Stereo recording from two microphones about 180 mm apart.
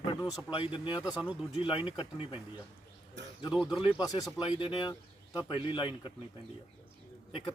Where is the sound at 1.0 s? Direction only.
5° right (ahead or behind).